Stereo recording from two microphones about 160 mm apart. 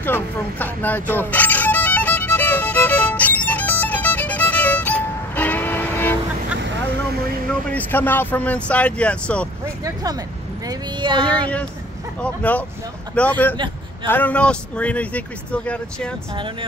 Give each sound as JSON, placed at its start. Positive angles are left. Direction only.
{"t": 0.0, "sound": "speech", "side_deg": 10}
{"t": 1.1, "sound": "music", "side_deg": 10}
{"t": 7.7, "sound": "speech", "side_deg": 10}
{"t": 9.8, "sound": "speech", "side_deg": -25}
{"t": 11.2, "sound": "speech", "side_deg": 10}